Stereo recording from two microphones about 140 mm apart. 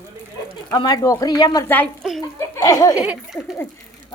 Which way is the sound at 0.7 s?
30° left (ahead or behind).